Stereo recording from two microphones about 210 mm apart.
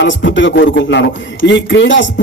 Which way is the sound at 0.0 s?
60° left (ahead or behind).